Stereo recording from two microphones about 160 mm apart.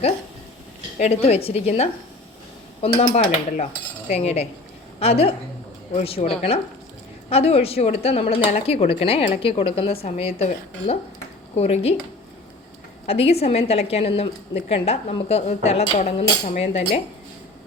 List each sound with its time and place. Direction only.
0.9 s a woman's voice: 40° left (ahead or behind)
13.1 s a woman's voice: 40° left (ahead or behind)